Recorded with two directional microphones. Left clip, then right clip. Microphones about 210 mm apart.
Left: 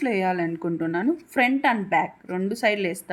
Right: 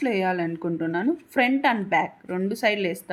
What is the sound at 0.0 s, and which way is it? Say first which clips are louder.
A woman's voice: even; 5° left (ahead or behind).